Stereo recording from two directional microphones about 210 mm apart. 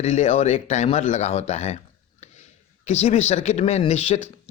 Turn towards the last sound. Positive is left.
turn(degrees=30)  # may be behind; listen again after turning